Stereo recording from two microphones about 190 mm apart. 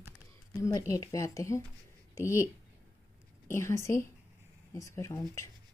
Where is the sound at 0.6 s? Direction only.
15° left (ahead or behind).